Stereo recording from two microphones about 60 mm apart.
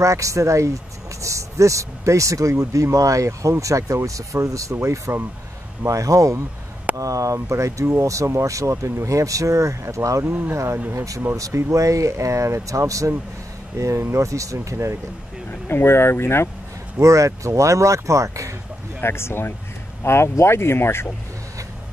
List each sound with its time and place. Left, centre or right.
0.0 s speech: right
10.5 s speech: right
11.3 s speech: right
15.7 s speech: left
17.0 s speech: right
18.9 s speech: left